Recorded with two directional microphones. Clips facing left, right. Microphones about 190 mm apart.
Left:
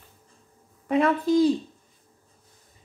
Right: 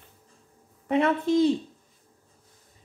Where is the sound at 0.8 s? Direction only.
25° right (ahead or behind).